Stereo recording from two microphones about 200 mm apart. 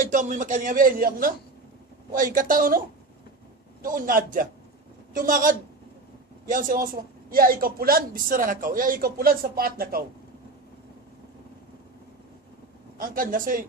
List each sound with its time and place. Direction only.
0.1 s a man's voice: 40° right (ahead or behind)
3.8 s a man's voice: 45° right (ahead or behind)
13.0 s a man's voice: 45° right (ahead or behind)